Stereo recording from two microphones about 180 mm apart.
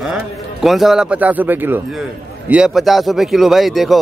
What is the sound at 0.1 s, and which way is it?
A man's voice, centre (ahead or behind).